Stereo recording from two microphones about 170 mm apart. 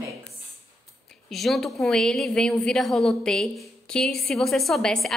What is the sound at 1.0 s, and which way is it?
A woman's voice, centre (ahead or behind).